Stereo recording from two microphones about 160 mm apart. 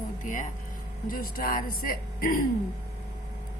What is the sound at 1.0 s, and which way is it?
Speech, 65° left (ahead or behind).